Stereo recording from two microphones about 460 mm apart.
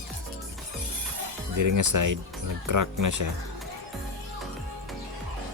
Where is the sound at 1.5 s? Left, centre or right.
Right.